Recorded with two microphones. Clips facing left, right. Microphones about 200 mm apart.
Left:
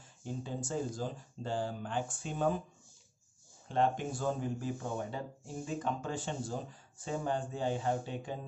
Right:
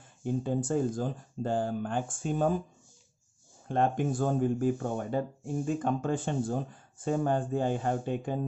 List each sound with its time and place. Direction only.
0.2 s speech: 55° right (ahead or behind)
3.6 s speech: 50° right (ahead or behind)